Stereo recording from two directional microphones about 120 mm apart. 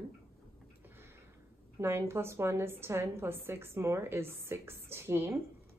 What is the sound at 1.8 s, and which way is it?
A woman's voice, 20° right (ahead or behind).